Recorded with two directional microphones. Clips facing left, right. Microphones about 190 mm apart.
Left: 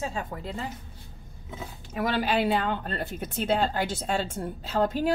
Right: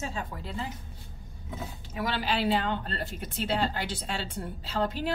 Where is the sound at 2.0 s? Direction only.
50° left (ahead or behind).